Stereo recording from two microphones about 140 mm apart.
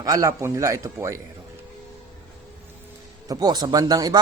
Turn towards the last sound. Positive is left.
turn(degrees=-25)  # may be behind; listen again after turning